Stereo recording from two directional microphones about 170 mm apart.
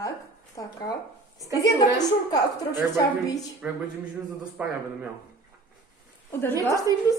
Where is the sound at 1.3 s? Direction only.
20° right (ahead or behind).